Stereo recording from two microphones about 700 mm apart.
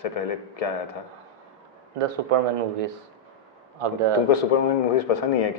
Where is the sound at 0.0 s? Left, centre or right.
Left.